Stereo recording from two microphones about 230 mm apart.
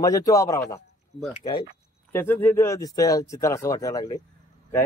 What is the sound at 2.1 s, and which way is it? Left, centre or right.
A man's voice, centre.